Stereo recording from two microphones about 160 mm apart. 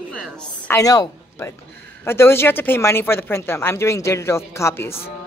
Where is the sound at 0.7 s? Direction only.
20° left (ahead or behind).